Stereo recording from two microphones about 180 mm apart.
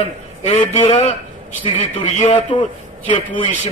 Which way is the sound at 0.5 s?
30° left (ahead or behind).